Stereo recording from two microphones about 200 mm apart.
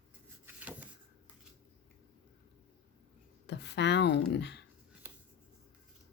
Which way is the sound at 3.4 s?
60° left (ahead or behind).